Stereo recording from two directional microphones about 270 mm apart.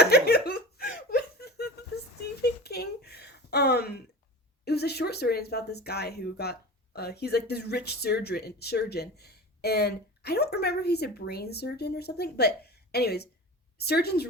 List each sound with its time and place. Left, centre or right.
0.0 s laughter: left
2.4 s a sound: left
4.6 s speech: left